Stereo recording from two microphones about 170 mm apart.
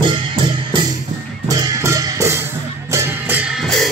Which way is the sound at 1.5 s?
20° right (ahead or behind).